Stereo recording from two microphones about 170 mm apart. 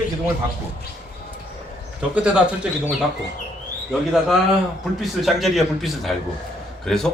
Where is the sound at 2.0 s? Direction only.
5° right (ahead or behind).